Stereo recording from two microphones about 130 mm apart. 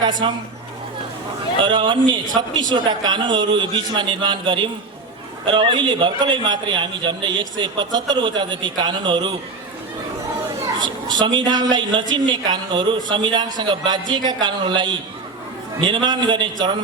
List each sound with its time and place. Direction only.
0.0 s speech: 35° right (ahead or behind)
1.6 s a woman's voice: 40° right (ahead or behind)
10.8 s a woman's voice: 35° right (ahead or behind)